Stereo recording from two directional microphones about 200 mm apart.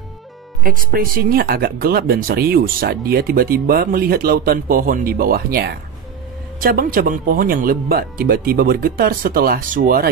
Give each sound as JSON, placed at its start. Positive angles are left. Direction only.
{"t": 0.7, "sound": "speech", "side_deg": -45}